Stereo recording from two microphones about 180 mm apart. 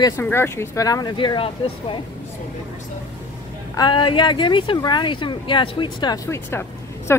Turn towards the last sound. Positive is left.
turn(degrees=15)  # may be behind; listen again after turning